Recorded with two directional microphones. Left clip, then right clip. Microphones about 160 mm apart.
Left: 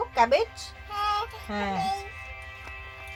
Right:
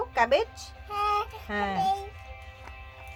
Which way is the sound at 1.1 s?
10° right (ahead or behind).